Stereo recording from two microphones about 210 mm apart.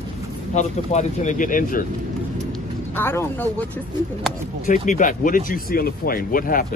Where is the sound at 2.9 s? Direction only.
10° left (ahead or behind).